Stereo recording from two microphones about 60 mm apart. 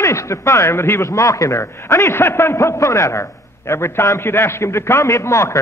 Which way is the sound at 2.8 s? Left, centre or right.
Left.